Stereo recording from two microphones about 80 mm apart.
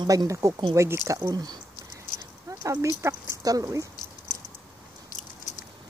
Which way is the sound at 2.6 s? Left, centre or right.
Right.